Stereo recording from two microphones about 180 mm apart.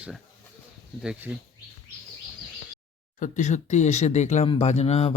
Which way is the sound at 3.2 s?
45° left (ahead or behind).